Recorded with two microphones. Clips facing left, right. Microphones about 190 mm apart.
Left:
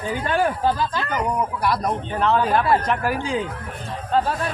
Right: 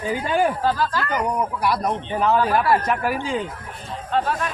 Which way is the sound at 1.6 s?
5° right (ahead or behind).